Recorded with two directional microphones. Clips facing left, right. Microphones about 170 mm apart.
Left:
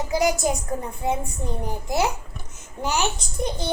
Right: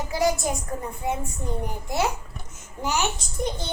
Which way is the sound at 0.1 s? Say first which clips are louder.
Left 2 dB; 20° left (ahead or behind).